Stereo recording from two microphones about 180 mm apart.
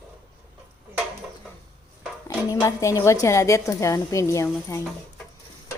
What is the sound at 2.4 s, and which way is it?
A woman's voice, 15° left (ahead or behind).